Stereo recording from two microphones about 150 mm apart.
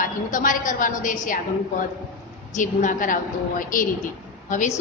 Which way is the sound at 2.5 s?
60° left (ahead or behind).